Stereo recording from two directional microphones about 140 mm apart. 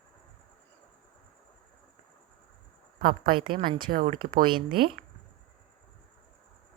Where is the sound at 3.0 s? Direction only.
90° right.